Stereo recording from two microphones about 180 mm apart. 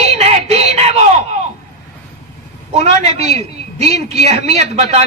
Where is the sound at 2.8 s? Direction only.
35° right (ahead or behind).